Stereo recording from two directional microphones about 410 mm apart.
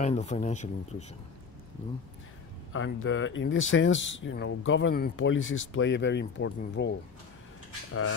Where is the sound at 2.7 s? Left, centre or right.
Left.